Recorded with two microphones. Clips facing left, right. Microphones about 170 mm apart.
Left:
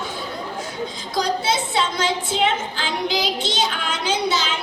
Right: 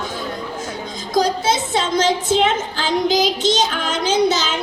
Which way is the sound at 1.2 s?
45° right (ahead or behind).